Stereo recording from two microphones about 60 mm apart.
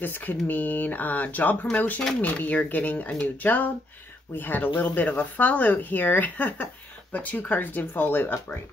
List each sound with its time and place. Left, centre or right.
0.0 s speech: left